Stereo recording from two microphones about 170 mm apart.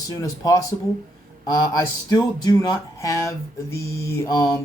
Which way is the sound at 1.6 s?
25° left (ahead or behind).